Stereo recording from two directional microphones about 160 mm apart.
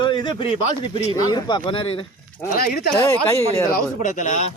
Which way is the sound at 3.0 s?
15° left (ahead or behind).